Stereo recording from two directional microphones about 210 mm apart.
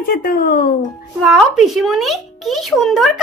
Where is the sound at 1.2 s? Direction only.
Centre (ahead or behind).